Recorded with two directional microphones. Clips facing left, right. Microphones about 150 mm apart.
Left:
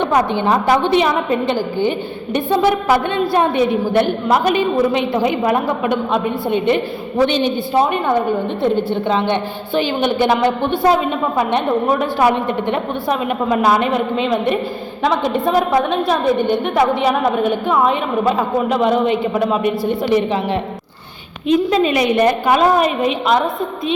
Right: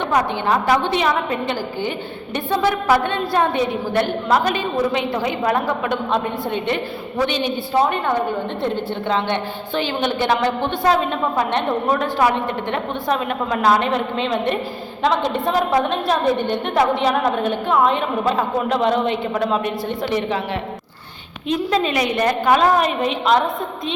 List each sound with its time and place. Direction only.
0.0 s a woman's voice: 15° left (ahead or behind)
7.3 s a woman's voice: 30° left (ahead or behind)
7.7 s a woman's voice: 15° left (ahead or behind)
21.4 s a woman's voice: 5° left (ahead or behind)